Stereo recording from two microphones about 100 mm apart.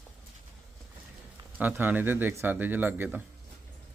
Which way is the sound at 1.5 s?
15° right (ahead or behind).